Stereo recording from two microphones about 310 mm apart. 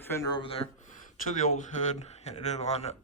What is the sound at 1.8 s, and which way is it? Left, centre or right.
Speech, left.